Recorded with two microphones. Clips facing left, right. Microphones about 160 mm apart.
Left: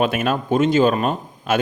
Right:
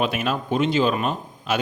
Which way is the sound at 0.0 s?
50° left (ahead or behind).